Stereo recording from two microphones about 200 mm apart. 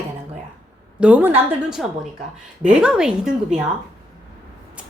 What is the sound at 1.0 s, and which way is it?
A woman's voice, 10° right (ahead or behind).